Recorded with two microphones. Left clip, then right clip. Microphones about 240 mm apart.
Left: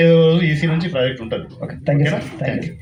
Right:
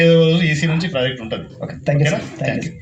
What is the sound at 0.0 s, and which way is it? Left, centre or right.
Speech, right.